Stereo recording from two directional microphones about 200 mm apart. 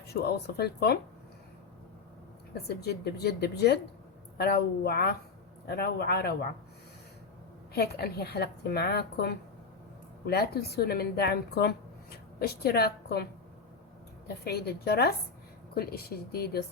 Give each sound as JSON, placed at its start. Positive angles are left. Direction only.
{"t": 0.1, "sound": "speech", "side_deg": 55}
{"t": 2.6, "sound": "speech", "side_deg": 55}
{"t": 7.7, "sound": "a woman's voice", "side_deg": 50}
{"t": 14.4, "sound": "speech", "side_deg": 50}